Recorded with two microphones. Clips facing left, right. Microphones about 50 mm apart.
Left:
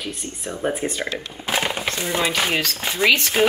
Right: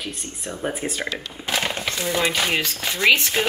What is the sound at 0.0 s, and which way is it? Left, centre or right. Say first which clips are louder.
Speech: left 2 dB; centre.